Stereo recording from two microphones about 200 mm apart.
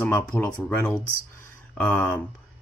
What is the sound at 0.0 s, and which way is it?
Speech, 10° left (ahead or behind).